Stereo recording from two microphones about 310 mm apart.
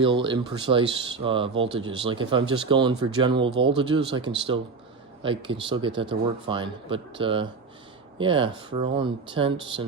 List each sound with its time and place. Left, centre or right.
0.0 s speech: centre